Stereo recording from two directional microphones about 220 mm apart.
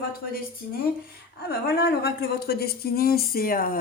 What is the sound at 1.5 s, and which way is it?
A woman's voice, 45° left (ahead or behind).